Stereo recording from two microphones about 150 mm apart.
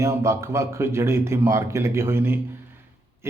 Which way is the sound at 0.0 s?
20° right (ahead or behind).